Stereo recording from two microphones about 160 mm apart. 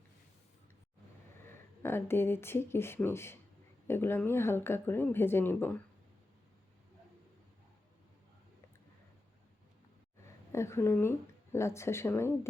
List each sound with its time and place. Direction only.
1.5 s speech: 15° left (ahead or behind)
10.5 s speech: 15° left (ahead or behind)